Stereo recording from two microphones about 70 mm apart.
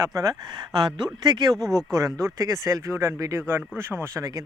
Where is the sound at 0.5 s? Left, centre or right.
Right.